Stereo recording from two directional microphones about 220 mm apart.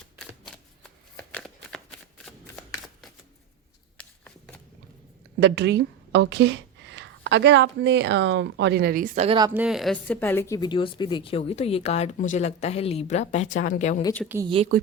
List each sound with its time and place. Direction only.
0.2 s a sound: 5° left (ahead or behind)
1.1 s shuffling cards: 5° left (ahead or behind)
3.9 s a sound: 5° left (ahead or behind)
5.4 s a woman's voice: 50° right (ahead or behind); by 9.5 s 25° right (ahead or behind)
9.6 s speech: centre (ahead or behind); by 14.0 s 35° left (ahead or behind)
14.0 s a woman's voice: 10° left (ahead or behind)
14.4 s speech: 25° right (ahead or behind)